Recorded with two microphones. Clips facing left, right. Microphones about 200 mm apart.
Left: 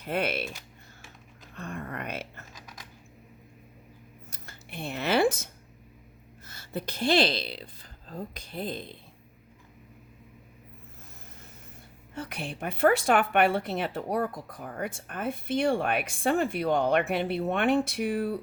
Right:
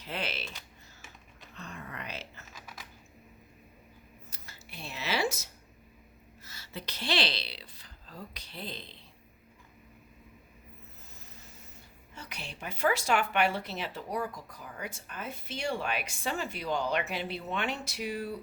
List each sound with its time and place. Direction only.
0.0 s a woman's voice: 55° left (ahead or behind)
1.5 s a sound: 55° left (ahead or behind)
4.3 s scissors: 55° left (ahead or behind)
6.4 s speech: 50° left (ahead or behind)
12.1 s a woman's voice: 55° left (ahead or behind)